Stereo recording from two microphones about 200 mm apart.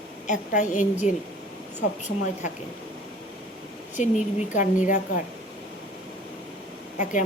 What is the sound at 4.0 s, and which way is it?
A woman's voice, 40° left (ahead or behind).